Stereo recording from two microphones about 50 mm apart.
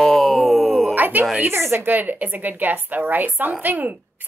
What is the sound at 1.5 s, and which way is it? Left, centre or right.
Speech, right.